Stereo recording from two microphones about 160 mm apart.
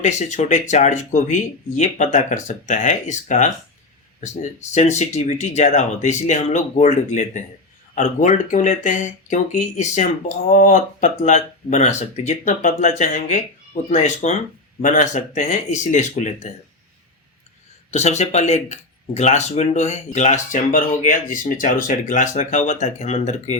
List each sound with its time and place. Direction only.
0.0 s speech: 50° left (ahead or behind)
4.7 s speech: 45° left (ahead or behind)
17.9 s speech: 45° left (ahead or behind)